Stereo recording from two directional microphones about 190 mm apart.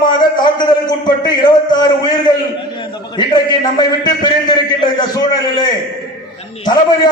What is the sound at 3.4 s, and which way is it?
A man's voice, 20° left (ahead or behind).